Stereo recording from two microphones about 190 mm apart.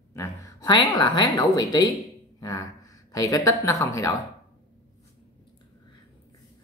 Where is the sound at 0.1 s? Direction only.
15° left (ahead or behind).